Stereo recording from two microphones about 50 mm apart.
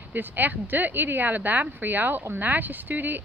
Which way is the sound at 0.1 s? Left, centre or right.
Right.